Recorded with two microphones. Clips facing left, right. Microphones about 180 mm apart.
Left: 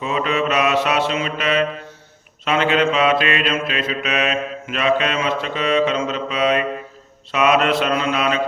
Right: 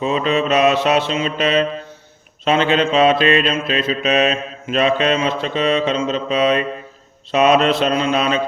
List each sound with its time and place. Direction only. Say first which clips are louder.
0.0 s mantra: right 3 dB; 30° right (ahead or behind)